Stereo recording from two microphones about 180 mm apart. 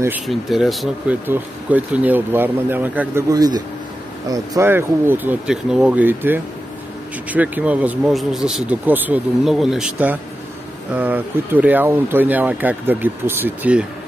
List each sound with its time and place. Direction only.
0.3 s speech: centre (ahead or behind)
3.3 s a man's voice: 20° right (ahead or behind)